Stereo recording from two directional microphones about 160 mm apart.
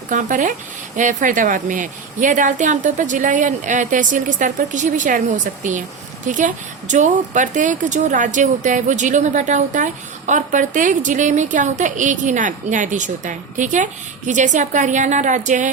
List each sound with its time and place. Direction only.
0.1 s speech: 50° right (ahead or behind)
6.2 s speech: 55° right (ahead or behind)